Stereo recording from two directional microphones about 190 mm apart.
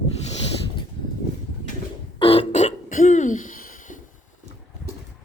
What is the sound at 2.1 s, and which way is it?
Throat clearing, 30° left (ahead or behind).